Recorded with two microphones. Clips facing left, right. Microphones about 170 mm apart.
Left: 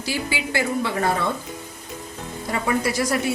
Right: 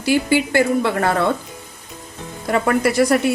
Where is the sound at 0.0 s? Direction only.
55° right (ahead or behind).